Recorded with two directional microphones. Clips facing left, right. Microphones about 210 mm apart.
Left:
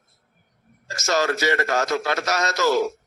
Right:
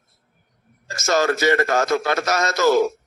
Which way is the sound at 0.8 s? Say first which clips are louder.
Right 3 dB; 50° right (ahead or behind).